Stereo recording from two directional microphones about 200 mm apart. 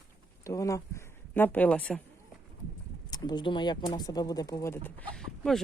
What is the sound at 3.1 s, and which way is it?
Speech, 20° left (ahead or behind).